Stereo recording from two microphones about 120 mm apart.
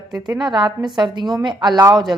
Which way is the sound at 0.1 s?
35° right (ahead or behind).